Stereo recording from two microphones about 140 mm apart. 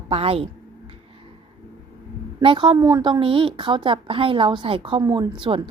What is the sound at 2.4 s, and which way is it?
A woman's voice, 35° right (ahead or behind).